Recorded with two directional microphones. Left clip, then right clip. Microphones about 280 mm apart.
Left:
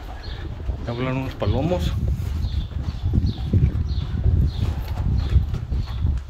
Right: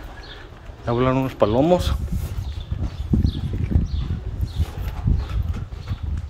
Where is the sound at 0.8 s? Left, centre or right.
Centre.